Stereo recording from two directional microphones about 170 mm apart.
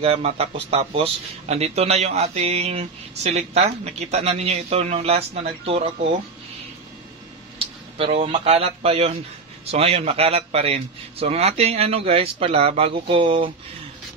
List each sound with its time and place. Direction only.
0.0 s speech: 35° right (ahead or behind)
7.5 s speech: 35° right (ahead or behind)